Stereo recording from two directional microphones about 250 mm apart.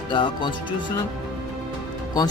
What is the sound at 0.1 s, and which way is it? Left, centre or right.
Speech, centre.